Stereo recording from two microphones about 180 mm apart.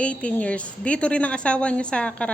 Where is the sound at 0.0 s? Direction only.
5° left (ahead or behind).